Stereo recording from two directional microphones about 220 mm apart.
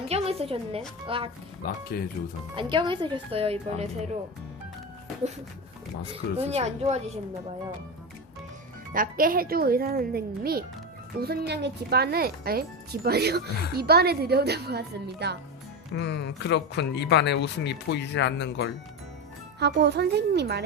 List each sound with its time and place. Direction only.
0.1 s a woman's voice: 25° right (ahead or behind)
1.9 s speech: 45° left (ahead or behind)
2.6 s speech: 20° right (ahead or behind)
6.5 s speech: 30° right (ahead or behind)
8.9 s speech: 40° right (ahead or behind)
16.0 s speech: 50° left (ahead or behind)
19.5 s speech: 50° right (ahead or behind)